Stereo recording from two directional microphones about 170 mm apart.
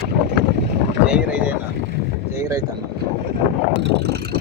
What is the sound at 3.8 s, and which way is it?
Vehicle, 80° right.